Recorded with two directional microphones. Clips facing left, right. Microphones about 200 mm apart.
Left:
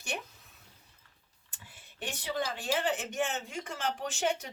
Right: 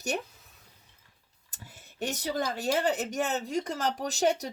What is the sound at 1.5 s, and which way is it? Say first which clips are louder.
Speech: right 5 dB; 40° right (ahead or behind).